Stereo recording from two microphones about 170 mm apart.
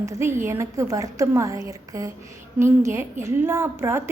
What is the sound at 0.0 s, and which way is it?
A woman's voice, 15° right (ahead or behind).